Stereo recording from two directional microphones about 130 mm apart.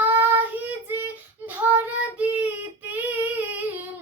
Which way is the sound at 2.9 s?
10° right (ahead or behind).